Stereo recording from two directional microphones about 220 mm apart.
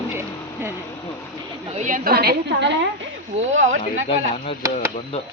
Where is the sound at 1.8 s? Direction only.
40° right (ahead or behind).